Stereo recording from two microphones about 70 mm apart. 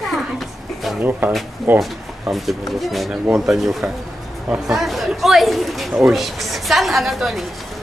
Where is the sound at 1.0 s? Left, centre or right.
Right.